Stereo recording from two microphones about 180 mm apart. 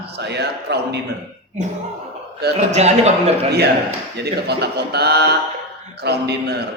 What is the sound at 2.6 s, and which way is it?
Speech, 35° right (ahead or behind).